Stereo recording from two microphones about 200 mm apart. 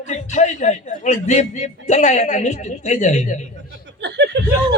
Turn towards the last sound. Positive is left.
turn(degrees=-60)  # may be behind; listen again after turning